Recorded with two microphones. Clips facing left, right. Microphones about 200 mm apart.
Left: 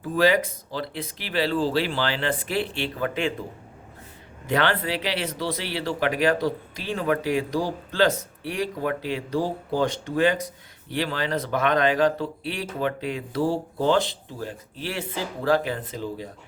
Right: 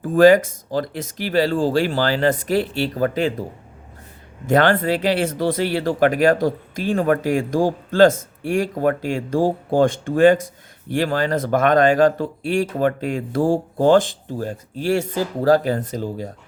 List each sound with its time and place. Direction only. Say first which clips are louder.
0.1 s speech: right 9 dB; 50° right (ahead or behind)
4.4 s speech: right 7 dB; 45° right (ahead or behind)